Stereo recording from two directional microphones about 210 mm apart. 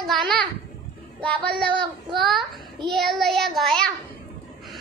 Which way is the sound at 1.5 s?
20° right (ahead or behind).